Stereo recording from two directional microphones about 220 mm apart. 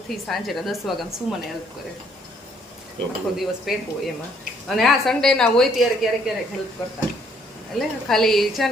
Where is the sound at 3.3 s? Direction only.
Centre (ahead or behind).